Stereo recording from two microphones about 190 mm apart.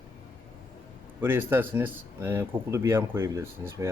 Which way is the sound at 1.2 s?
10° right (ahead or behind).